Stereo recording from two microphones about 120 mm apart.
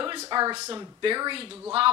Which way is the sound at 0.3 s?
35° right (ahead or behind).